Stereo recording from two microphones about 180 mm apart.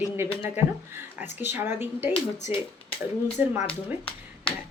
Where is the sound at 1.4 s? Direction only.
10° right (ahead or behind).